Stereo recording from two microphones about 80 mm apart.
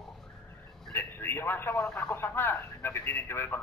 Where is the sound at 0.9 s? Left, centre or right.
Left.